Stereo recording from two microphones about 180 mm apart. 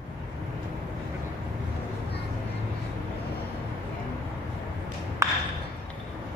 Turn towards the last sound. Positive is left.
turn(degrees=-20)  # may be behind; listen again after turning